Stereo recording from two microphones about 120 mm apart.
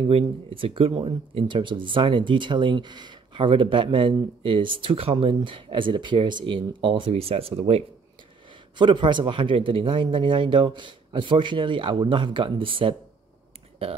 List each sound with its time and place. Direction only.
0.1 s speech: 50° right (ahead or behind)
8.7 s speech: 40° right (ahead or behind)